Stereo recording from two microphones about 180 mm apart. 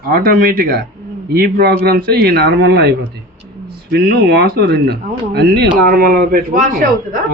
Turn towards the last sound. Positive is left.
turn(degrees=-45)  # may be behind; listen again after turning